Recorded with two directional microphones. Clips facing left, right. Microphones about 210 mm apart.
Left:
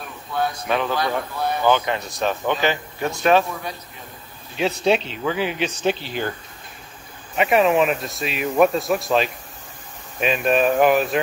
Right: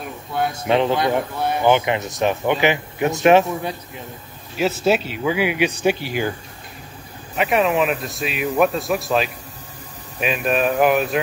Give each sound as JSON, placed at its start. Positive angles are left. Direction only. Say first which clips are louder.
{"t": 0.3, "sound": "speech", "louder": "right 3 dB", "side_deg": -25}
{"t": 4.6, "sound": "speech", "louder": "right 1 dB", "side_deg": -5}
{"t": 7.3, "sound": "a man's voice", "louder": "left 1 dB", "side_deg": 0}